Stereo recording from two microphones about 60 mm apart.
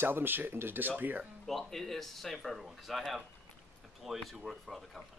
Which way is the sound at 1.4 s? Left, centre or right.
Centre.